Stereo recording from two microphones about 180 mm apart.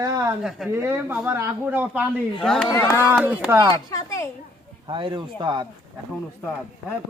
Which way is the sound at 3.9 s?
15° left (ahead or behind).